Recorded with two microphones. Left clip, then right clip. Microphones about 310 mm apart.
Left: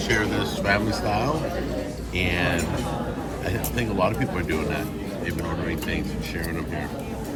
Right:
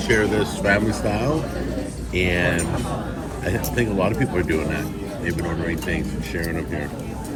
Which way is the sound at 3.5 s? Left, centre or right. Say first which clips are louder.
Right 6 dB; centre.